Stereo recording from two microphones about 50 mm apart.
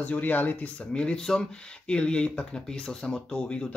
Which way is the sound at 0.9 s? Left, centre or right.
Centre.